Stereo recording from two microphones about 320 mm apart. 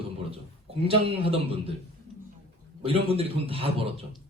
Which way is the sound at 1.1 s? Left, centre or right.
Centre.